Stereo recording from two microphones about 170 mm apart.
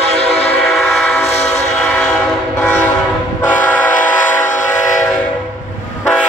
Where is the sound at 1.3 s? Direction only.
40° left (ahead or behind).